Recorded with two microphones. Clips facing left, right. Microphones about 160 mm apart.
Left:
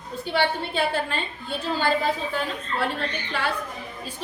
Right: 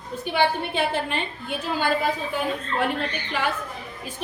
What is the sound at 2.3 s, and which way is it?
Speech, 15° right (ahead or behind).